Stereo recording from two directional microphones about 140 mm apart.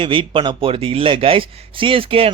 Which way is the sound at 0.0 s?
35° right (ahead or behind).